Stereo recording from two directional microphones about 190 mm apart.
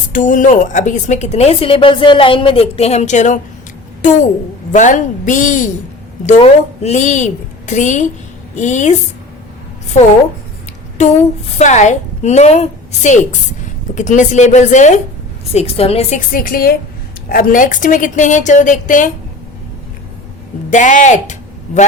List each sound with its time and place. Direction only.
0.1 s a woman's voice: 40° left (ahead or behind)
11.5 s a woman's voice: 40° left (ahead or behind)
20.7 s a woman's voice: 40° left (ahead or behind)